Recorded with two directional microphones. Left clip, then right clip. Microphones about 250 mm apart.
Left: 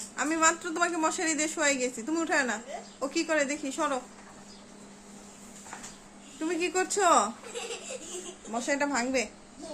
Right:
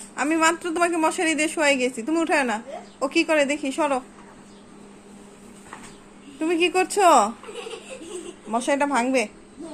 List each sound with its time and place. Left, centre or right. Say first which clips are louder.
0.2 s a woman's voice: right 5 dB; centre
6.4 s a woman's voice: right 8 dB; centre
8.5 s a woman's voice: right 7 dB; centre